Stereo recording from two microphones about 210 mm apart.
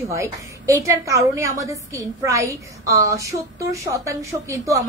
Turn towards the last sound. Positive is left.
turn(degrees=-15)  # may be behind; listen again after turning